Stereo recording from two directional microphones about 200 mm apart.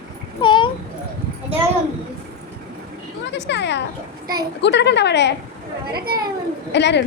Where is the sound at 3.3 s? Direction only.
60° left (ahead or behind).